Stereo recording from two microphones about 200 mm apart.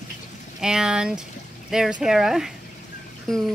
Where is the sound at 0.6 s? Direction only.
5° right (ahead or behind).